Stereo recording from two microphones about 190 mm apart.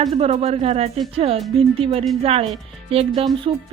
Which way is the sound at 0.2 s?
30° right (ahead or behind).